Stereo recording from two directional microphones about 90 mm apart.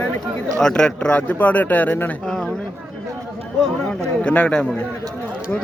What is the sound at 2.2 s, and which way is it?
Speech, 5° left (ahead or behind).